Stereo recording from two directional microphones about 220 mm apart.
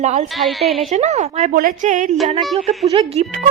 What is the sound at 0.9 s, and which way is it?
Speech, 30° right (ahead or behind).